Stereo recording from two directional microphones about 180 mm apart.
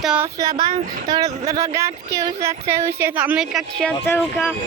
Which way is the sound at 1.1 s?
20° right (ahead or behind).